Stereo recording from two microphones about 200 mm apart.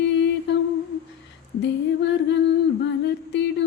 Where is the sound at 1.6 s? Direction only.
60° left (ahead or behind).